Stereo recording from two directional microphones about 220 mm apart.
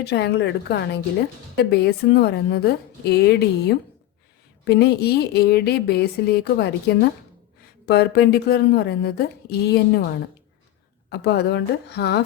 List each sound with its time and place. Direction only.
0.0 s a woman's voice: 50° left (ahead or behind)
11.1 s a woman's voice: 50° left (ahead or behind)